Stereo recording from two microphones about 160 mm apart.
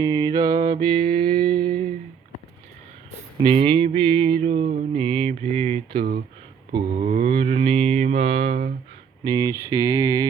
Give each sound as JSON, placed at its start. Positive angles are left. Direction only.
{"t": 0.0, "sound": "music", "side_deg": -25}
{"t": 3.4, "sound": "music", "side_deg": -35}
{"t": 7.0, "sound": "mantra", "side_deg": -50}
{"t": 7.3, "sound": "music", "side_deg": -40}
{"t": 9.2, "sound": "mantra", "side_deg": -25}